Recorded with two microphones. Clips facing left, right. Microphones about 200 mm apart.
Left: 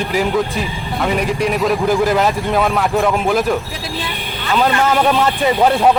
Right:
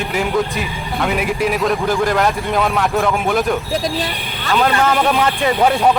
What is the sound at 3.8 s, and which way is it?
Speech, 40° right (ahead or behind).